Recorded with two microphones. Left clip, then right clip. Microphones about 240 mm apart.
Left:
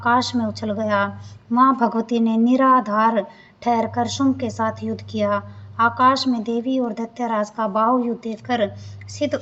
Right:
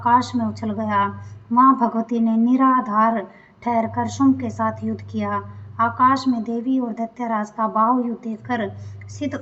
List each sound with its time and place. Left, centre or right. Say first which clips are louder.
0.0 s a woman's voice: right 1 dB; left